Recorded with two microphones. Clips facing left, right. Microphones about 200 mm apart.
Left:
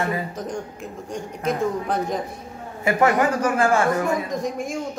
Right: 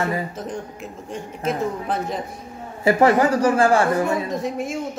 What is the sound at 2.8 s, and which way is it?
Speech, 30° right (ahead or behind).